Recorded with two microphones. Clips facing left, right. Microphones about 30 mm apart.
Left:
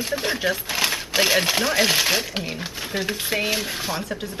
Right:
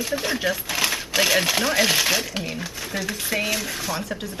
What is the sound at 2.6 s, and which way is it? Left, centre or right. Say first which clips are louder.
Speech: left 2 dB; left.